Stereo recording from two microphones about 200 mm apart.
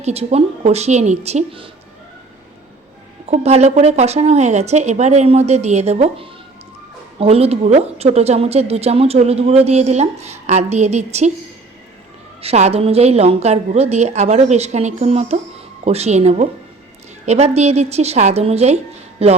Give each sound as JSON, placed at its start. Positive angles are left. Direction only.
{"t": 0.0, "sound": "a woman's voice", "side_deg": -30}
{"t": 3.2, "sound": "a woman's voice", "side_deg": -35}
{"t": 12.4, "sound": "a woman's voice", "side_deg": -30}